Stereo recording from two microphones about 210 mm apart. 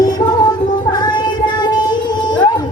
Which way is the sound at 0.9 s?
20° left (ahead or behind).